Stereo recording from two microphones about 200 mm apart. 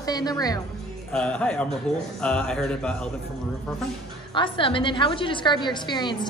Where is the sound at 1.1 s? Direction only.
5° left (ahead or behind).